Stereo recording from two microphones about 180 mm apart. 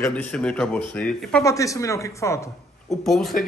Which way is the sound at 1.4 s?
20° left (ahead or behind).